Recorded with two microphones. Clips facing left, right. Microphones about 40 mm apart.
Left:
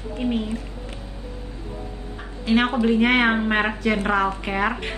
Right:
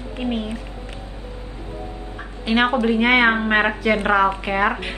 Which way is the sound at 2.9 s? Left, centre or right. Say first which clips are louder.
Right 3 dB; right.